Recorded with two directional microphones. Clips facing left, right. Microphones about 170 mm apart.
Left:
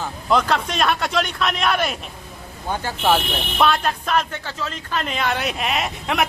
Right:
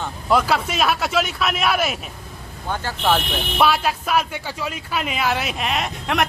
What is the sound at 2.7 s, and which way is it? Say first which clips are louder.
Speech: left 1 dB; 15° left (ahead or behind).